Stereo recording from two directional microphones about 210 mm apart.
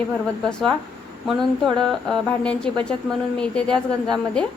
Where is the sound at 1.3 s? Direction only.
Centre (ahead or behind).